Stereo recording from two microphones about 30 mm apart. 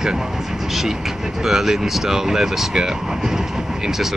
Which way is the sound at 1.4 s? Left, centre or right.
Centre.